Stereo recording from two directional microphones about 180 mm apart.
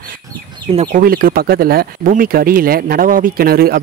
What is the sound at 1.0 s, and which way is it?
Speech, 55° right (ahead or behind).